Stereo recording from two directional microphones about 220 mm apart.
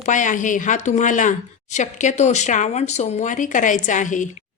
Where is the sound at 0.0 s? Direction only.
35° left (ahead or behind).